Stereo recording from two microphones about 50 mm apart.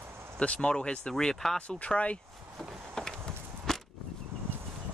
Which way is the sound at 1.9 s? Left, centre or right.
Left.